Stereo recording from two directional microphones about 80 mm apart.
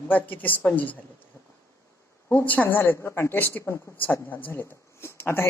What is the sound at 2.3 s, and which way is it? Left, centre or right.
A woman's voice, left.